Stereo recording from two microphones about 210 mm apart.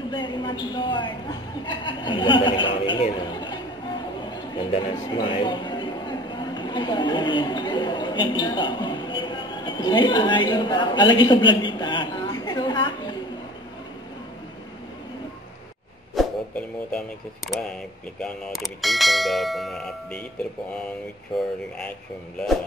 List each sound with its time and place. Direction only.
0.1 s a man's voice: 20° left (ahead or behind)
16.2 s a sound: 5° left (ahead or behind)
17.5 s bell: 5° left (ahead or behind)
21.3 s bell: centre (ahead or behind)